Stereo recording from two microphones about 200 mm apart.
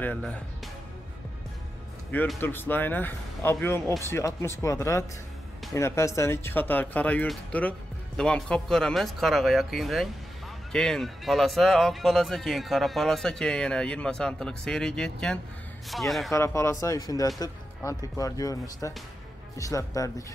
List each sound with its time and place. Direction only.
0.0 s speech: 5° left (ahead or behind)
2.1 s speech: 10° left (ahead or behind)
16.3 s speech: 15° left (ahead or behind)